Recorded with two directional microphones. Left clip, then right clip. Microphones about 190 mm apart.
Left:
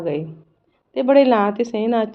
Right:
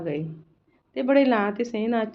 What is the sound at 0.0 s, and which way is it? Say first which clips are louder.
Speech: left 6 dB; 50° left (ahead or behind).